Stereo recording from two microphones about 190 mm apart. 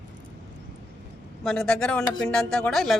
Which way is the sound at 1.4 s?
5° left (ahead or behind).